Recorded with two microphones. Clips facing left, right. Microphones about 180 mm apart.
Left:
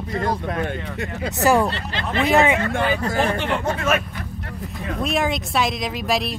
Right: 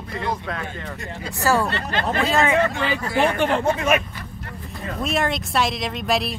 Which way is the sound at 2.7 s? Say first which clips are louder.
Left 3 dB; 50° left (ahead or behind).